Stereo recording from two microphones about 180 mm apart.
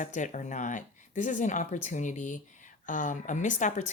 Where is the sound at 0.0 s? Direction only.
45° left (ahead or behind).